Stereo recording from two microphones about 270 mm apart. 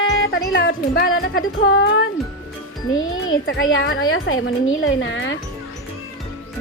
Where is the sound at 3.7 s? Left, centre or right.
Left.